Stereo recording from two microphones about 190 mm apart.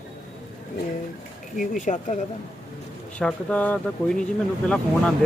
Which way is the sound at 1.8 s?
40° left (ahead or behind).